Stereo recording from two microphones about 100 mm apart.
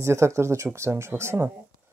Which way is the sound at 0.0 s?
30° right (ahead or behind).